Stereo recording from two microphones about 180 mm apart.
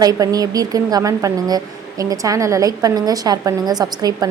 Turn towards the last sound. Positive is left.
turn(degrees=-20)  # may be behind; listen again after turning